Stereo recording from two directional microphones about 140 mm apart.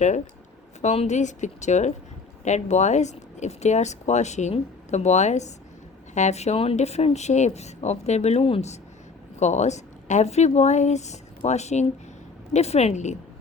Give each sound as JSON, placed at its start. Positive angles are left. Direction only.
{"t": 0.8, "sound": "speech", "side_deg": 55}